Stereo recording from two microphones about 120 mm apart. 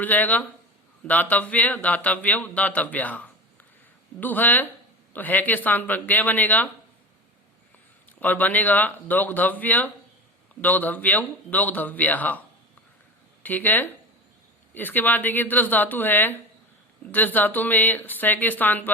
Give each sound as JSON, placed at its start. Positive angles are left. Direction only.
{"t": 0.0, "sound": "speech", "side_deg": 15}
{"t": 8.2, "sound": "speech", "side_deg": 15}